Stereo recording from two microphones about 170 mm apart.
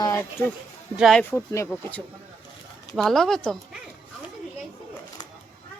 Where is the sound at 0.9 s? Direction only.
Centre (ahead or behind).